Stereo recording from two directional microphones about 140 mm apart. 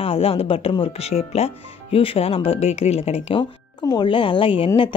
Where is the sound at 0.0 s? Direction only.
45° left (ahead or behind).